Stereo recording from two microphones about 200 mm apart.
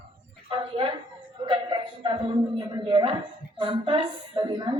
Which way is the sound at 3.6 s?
25° right (ahead or behind).